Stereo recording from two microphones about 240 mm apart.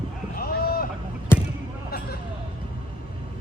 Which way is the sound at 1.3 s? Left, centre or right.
Centre.